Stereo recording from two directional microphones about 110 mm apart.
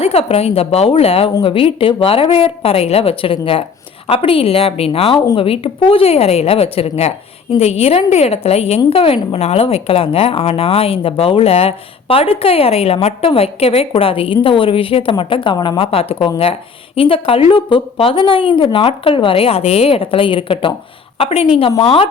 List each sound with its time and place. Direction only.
0.0 s a woman's voice: 65° left (ahead or behind)